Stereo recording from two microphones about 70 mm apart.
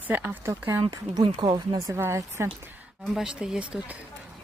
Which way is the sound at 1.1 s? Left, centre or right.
Right.